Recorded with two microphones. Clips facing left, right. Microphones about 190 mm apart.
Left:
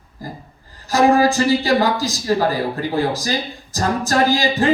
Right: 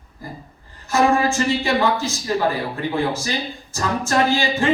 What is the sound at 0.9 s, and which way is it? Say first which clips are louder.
Speech: left 3 dB; 35° left (ahead or behind).